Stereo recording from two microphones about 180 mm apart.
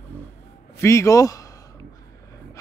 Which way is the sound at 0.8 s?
15° left (ahead or behind).